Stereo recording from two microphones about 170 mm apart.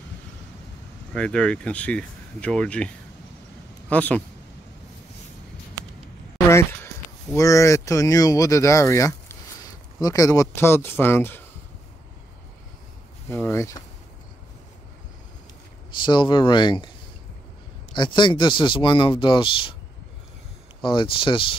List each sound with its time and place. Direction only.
1.1 s speech: 5° left (ahead or behind)
3.9 s speech: 5° left (ahead or behind)
7.3 s speech: 20° left (ahead or behind)
13.3 s speech: 15° left (ahead or behind)
16.1 s speech: 25° left (ahead or behind)
17.9 s speech: 25° left (ahead or behind)
20.8 s speech: 30° left (ahead or behind)